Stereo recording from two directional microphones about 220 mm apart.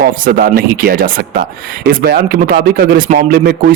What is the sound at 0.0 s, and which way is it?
Speech, 40° right (ahead or behind).